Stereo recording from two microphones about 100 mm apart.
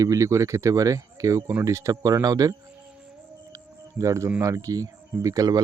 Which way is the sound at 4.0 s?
30° right (ahead or behind).